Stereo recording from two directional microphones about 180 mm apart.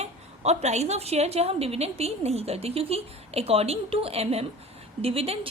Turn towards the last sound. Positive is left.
turn(degrees=-35)  # may be behind; listen again after turning